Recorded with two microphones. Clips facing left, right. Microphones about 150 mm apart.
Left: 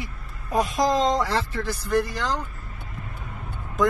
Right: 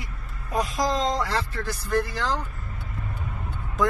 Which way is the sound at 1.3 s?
5° left (ahead or behind).